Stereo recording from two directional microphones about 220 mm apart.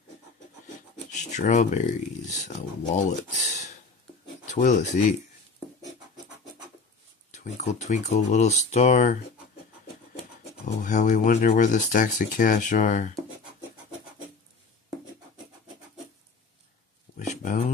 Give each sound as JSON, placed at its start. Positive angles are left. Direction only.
{"t": 1.1, "sound": "speech", "side_deg": 35}
{"t": 3.1, "sound": "a sound", "side_deg": 35}
{"t": 4.5, "sound": "speech", "side_deg": 35}
{"t": 7.2, "sound": "speech", "side_deg": 35}
{"t": 10.6, "sound": "speech", "side_deg": 35}
{"t": 17.3, "sound": "a sound", "side_deg": 35}